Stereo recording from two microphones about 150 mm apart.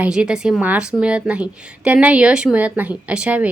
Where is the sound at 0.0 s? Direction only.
5° right (ahead or behind).